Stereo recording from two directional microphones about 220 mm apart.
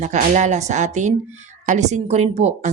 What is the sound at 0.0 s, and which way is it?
Speech, 35° right (ahead or behind).